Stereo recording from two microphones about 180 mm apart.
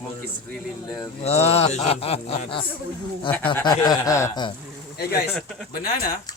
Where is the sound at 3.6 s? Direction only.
20° left (ahead or behind).